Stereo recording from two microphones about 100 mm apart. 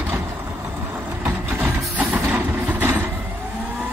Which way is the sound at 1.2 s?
15° right (ahead or behind).